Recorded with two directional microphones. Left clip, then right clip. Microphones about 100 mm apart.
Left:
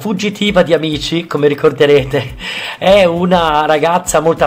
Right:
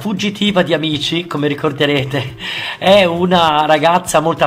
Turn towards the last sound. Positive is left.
turn(degrees=30)  # may be behind; listen again after turning